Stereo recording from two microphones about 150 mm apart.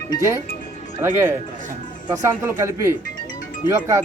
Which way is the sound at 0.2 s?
20° right (ahead or behind).